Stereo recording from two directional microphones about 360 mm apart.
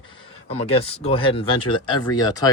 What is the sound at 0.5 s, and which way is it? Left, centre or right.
Speech, centre.